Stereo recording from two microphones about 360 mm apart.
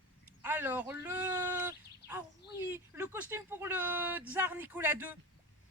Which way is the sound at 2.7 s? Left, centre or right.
Centre.